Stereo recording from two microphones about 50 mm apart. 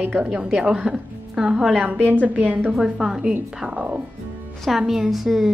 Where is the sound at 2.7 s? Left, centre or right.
Centre.